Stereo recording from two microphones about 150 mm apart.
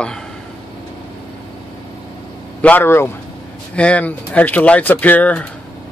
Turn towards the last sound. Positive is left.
turn(degrees=10)  # may be behind; listen again after turning